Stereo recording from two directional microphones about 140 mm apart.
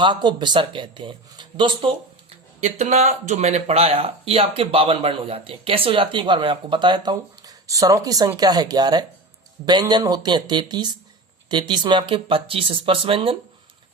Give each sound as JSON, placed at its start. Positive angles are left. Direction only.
{"t": 0.0, "sound": "speech", "side_deg": -35}
{"t": 2.6, "sound": "speech", "side_deg": -55}